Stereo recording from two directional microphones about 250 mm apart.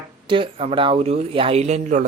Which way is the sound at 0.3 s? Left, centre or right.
Right.